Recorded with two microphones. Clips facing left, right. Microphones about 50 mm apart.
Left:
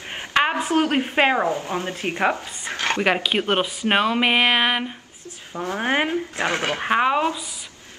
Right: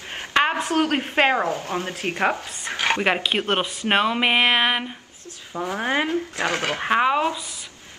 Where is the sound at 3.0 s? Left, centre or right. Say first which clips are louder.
Left 1 dB; centre.